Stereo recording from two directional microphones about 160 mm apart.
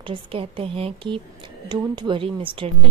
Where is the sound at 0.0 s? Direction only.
35° right (ahead or behind).